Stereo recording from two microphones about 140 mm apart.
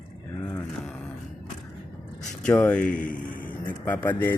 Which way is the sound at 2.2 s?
10° left (ahead or behind).